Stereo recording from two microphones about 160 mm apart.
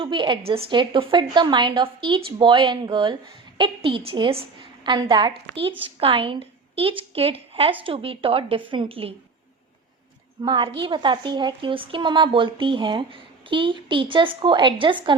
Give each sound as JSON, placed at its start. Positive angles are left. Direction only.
{"t": 0.0, "sound": "a woman's voice", "side_deg": -30}
{"t": 10.4, "sound": "speech", "side_deg": -30}